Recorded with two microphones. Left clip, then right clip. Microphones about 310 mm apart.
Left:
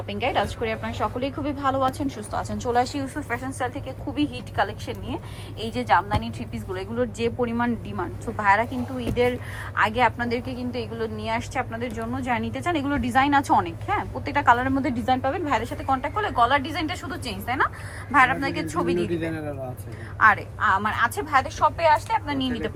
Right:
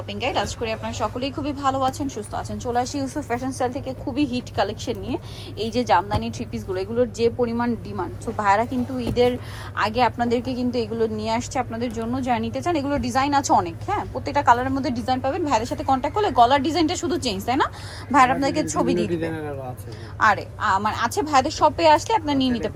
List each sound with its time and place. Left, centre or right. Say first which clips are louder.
0.1 s a woman's voice: even; centre
9.7 s a woman's voice: even; centre
18.1 s a woman's voice: right 2 dB; centre
18.9 s speech: right 2 dB; centre
20.1 s a woman's voice: left 1 dB; centre
21.4 s speech: right 3 dB; right
22.4 s speech: right 5 dB; centre